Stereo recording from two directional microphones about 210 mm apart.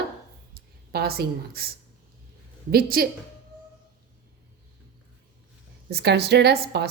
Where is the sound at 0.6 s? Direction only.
45° right (ahead or behind).